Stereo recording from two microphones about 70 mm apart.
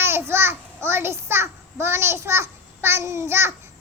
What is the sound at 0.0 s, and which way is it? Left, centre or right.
A child's voice, right.